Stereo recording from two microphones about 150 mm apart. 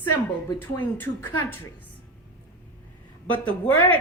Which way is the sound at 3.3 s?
10° left (ahead or behind).